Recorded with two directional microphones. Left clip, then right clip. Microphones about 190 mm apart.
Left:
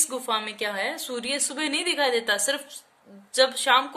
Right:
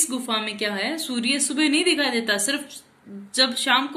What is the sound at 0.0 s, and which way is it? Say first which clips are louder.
A woman's voice: right 1 dB; 55° left (ahead or behind).